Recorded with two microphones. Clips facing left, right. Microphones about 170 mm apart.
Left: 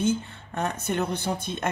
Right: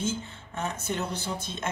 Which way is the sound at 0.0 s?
60° left (ahead or behind).